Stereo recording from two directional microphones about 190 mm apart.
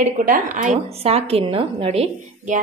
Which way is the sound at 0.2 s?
45° right (ahead or behind).